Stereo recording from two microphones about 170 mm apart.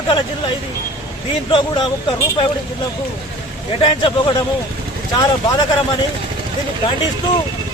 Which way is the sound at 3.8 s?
30° left (ahead or behind).